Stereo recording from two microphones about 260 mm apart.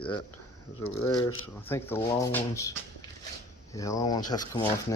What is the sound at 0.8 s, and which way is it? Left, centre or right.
Speech, left.